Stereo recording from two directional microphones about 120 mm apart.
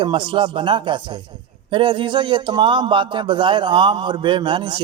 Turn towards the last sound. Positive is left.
turn(degrees=-40)  # may be behind; listen again after turning